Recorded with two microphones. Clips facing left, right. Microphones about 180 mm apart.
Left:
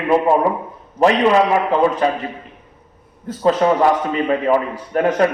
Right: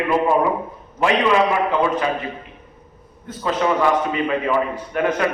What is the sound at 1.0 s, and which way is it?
A man's voice, 40° left (ahead or behind).